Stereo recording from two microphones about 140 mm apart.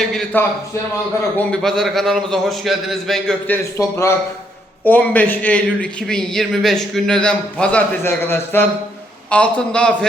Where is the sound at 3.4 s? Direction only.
15° left (ahead or behind).